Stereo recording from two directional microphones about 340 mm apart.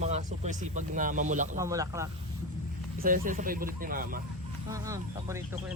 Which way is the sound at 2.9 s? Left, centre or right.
Right.